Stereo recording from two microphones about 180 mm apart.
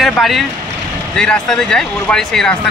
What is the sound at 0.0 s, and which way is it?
Speech, centre (ahead or behind).